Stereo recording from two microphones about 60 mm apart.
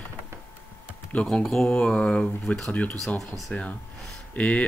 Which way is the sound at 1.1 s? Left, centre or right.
Centre.